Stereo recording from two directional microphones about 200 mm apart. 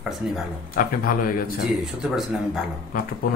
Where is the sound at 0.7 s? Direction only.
45° left (ahead or behind).